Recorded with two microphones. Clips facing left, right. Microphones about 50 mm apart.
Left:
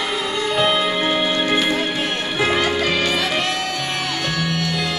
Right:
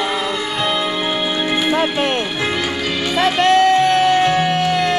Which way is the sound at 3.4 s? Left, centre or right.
Right.